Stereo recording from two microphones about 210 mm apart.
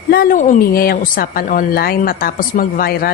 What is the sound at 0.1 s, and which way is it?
A woman's voice, 45° left (ahead or behind).